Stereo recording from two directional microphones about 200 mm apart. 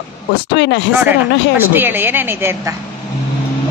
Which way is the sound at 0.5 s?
60° left (ahead or behind).